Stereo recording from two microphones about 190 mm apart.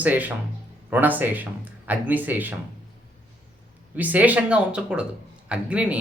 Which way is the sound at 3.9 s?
10° right (ahead or behind).